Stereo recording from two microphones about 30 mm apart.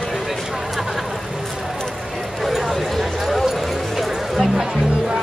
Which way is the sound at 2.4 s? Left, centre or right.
Centre.